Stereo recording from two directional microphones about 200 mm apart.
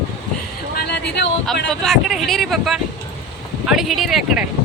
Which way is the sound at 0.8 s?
55° left (ahead or behind).